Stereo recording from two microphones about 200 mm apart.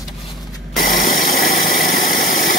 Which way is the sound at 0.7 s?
45° left (ahead or behind).